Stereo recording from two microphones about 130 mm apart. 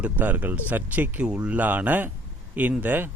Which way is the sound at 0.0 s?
15° right (ahead or behind).